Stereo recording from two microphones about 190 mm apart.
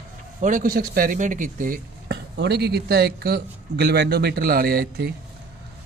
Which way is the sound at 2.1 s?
60° right (ahead or behind).